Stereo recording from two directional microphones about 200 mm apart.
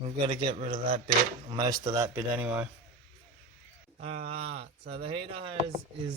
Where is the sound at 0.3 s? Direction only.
25° right (ahead or behind).